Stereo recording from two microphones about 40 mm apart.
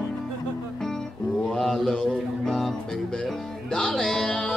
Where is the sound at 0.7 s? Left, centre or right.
Centre.